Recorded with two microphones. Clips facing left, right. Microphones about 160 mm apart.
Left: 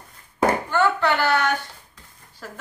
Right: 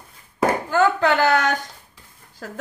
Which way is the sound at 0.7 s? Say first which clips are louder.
Right 3 dB; 40° right (ahead or behind).